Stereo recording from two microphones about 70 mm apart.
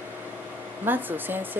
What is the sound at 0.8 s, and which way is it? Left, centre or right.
Speech, right.